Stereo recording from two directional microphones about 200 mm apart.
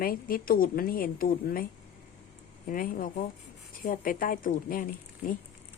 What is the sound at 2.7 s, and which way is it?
A woman's voice, 45° left (ahead or behind).